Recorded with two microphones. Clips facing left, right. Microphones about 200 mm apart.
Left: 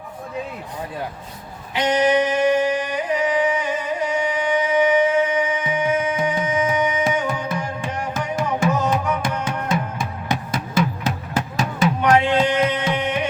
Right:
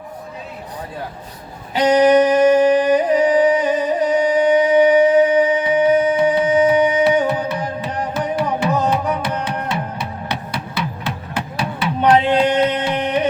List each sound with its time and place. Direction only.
1.7 s a sound: 35° right (ahead or behind)
7.1 s music: 35° right (ahead or behind)
8.4 s music: 45° left (ahead or behind)
12.1 s music: 35° right (ahead or behind)